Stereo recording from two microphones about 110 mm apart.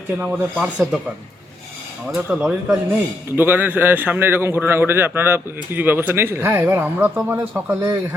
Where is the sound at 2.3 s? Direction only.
15° right (ahead or behind).